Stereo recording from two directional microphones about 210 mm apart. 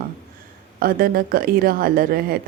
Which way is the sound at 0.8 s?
45° right (ahead or behind).